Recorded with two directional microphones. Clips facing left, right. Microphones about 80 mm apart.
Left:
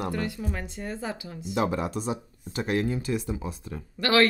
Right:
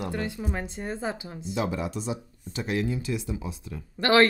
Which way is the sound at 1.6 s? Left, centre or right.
Left.